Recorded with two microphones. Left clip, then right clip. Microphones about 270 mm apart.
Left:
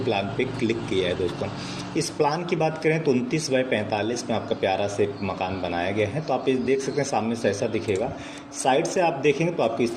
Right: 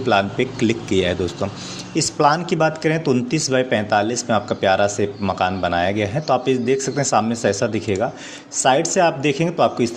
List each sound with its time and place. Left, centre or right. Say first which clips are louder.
0.1 s a man's voice: right 9 dB; right